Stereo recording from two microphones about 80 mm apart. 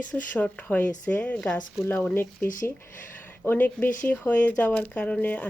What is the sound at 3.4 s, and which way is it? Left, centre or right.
Speech, left.